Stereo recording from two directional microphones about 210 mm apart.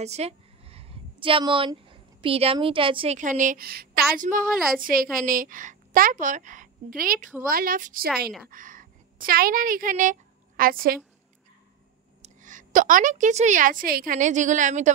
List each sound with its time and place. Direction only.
0.0 s a woman's voice: 30° right (ahead or behind)
3.2 s a woman's voice: 35° right (ahead or behind)
12.2 s a woman's voice: 35° right (ahead or behind)